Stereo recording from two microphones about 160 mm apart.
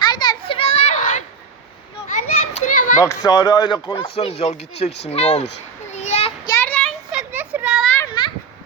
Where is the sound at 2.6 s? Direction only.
55° left (ahead or behind).